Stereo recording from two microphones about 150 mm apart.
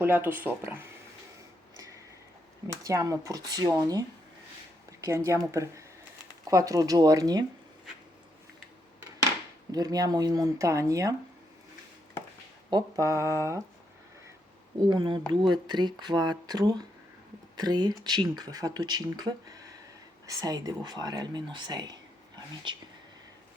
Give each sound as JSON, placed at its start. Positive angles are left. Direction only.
{"t": 0.0, "sound": "speech", "side_deg": -15}
{"t": 1.7, "sound": "a sound", "side_deg": -20}
{"t": 2.8, "sound": "speech", "side_deg": -20}
{"t": 9.7, "sound": "speech", "side_deg": -25}
{"t": 12.7, "sound": "speech", "side_deg": -20}
{"t": 14.8, "sound": "speech", "side_deg": -30}